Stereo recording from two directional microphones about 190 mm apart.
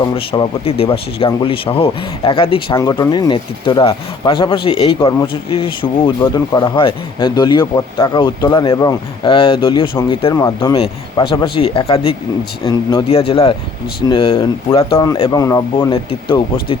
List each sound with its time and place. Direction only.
0.3 s speech: 30° left (ahead or behind)
2.7 s speech: 20° left (ahead or behind)
13.1 s speech: 30° left (ahead or behind)